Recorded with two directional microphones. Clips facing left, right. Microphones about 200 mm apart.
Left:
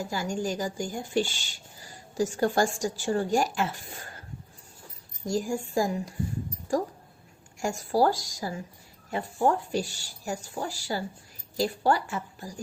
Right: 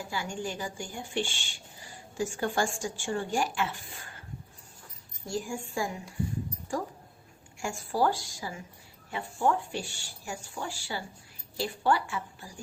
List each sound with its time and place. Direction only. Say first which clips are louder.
0.0 s a woman's voice: left 5 dB; 40° left (ahead or behind)
5.2 s a woman's voice: left 6 dB; 40° left (ahead or behind)
7.6 s a woman's voice: left 4 dB; 40° left (ahead or behind)